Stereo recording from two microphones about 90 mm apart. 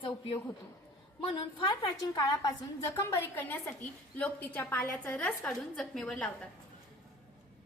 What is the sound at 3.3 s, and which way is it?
A woman's voice, 20° left (ahead or behind).